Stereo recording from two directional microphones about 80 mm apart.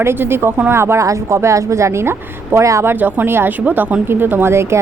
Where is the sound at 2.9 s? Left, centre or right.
Right.